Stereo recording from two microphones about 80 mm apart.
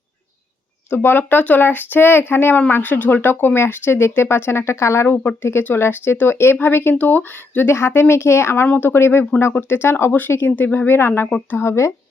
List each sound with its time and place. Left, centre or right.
0.9 s speech: left
5.0 s speech: left